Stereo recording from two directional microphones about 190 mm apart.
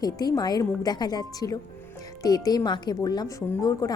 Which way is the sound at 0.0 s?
20° left (ahead or behind).